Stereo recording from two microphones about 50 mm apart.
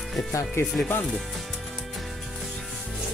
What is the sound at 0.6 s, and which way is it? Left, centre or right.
Speech, left.